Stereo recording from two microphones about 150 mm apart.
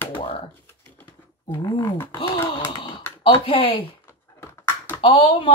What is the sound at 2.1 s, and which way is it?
Speech, 35° left (ahead or behind).